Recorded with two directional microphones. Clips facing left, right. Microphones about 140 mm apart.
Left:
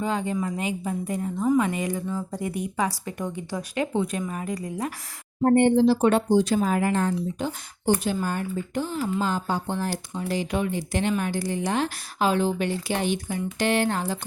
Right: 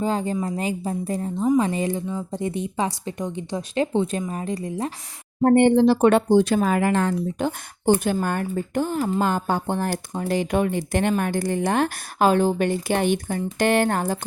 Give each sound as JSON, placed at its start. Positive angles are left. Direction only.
{"t": 0.0, "sound": "speech", "side_deg": -35}
{"t": 5.4, "sound": "speech", "side_deg": -80}
{"t": 7.2, "sound": "speech", "side_deg": -60}